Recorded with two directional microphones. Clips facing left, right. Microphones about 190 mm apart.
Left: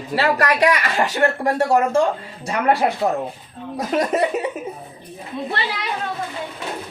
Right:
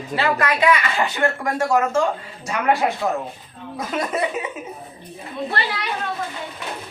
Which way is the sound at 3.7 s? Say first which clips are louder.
Left 5 dB; 40° left (ahead or behind).